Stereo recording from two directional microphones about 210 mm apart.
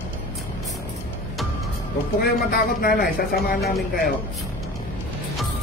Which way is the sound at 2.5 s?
45° left (ahead or behind).